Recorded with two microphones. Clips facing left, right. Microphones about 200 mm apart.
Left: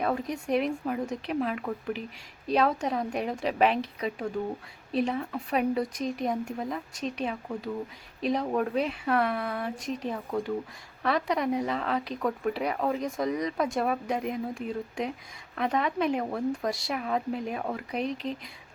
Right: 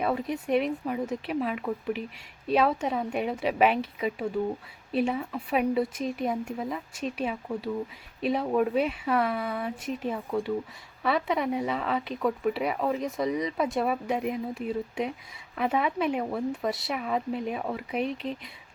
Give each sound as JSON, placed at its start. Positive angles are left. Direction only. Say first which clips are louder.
{"t": 0.0, "sound": "speech", "louder": "right 1 dB", "side_deg": 0}